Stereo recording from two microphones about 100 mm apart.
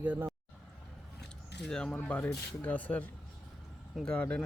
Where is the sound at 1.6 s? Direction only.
5° left (ahead or behind).